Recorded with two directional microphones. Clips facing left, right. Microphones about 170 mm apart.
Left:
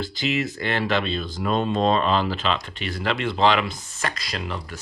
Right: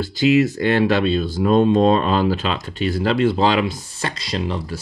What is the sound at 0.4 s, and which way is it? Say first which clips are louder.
Speech: right 9 dB; 40° right (ahead or behind).